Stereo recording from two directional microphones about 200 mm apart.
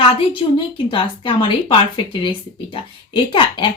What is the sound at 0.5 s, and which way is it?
Speech, 25° left (ahead or behind).